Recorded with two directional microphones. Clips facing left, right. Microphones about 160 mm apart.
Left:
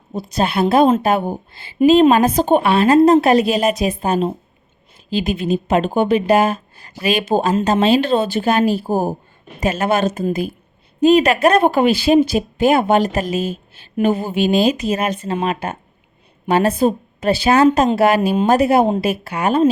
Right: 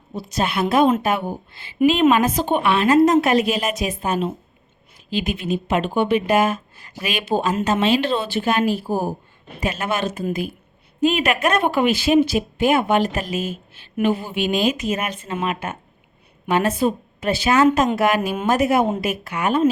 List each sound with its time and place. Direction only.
0.1 s speech: 35° left (ahead or behind)